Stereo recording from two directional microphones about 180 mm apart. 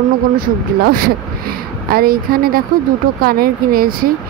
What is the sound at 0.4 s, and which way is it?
Speech, 55° right (ahead or behind).